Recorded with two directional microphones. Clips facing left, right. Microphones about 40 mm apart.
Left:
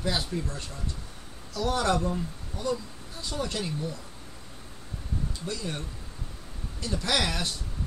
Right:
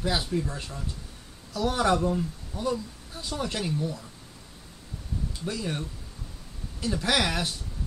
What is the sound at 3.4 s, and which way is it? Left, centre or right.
Speech, centre.